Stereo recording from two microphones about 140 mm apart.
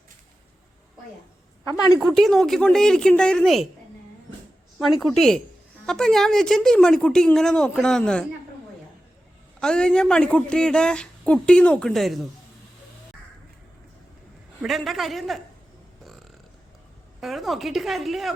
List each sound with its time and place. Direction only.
2.1 s speech: 5° left (ahead or behind)
4.8 s speech: centre (ahead or behind)
9.6 s speech: 5° left (ahead or behind)
14.6 s speech: centre (ahead or behind)
17.2 s speech: centre (ahead or behind)